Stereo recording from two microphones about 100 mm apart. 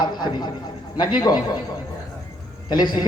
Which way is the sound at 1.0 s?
45° left (ahead or behind).